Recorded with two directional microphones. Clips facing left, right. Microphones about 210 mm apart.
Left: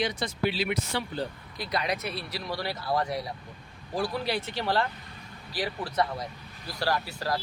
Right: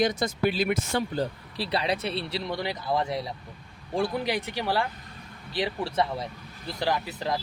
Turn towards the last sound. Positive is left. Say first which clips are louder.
# right 1 dB
turn(degrees=-20)  # may be behind; listen again after turning